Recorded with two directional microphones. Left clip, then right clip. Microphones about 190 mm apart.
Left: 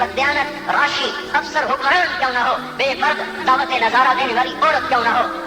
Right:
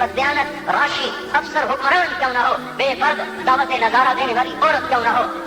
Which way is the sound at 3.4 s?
50° right (ahead or behind).